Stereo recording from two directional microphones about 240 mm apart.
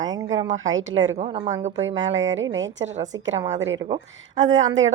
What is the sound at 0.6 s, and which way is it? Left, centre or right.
Speech, right.